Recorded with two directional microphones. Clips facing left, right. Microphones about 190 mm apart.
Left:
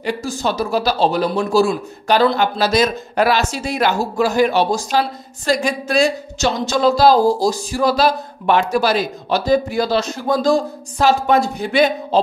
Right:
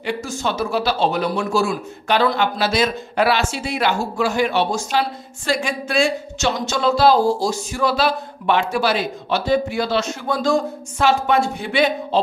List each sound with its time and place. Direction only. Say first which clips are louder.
0.0 s speech: left 3 dB; 35° left (ahead or behind)